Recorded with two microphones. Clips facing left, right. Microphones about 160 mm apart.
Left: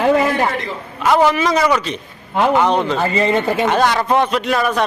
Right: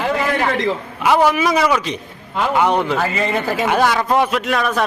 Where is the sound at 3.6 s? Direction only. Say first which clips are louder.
Left 1 dB; 5° right (ahead or behind).